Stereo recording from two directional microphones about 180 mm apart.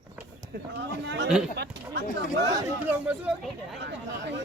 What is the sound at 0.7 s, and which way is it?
Speech, 75° right (ahead or behind).